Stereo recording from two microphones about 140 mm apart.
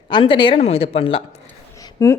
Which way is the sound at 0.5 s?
45° left (ahead or behind).